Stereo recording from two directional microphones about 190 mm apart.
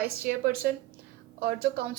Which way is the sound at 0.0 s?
50° right (ahead or behind).